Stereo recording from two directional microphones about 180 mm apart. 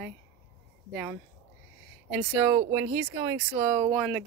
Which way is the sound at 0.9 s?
5° right (ahead or behind).